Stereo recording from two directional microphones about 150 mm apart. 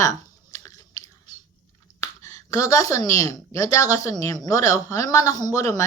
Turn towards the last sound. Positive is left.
turn(degrees=20)  # may be behind; listen again after turning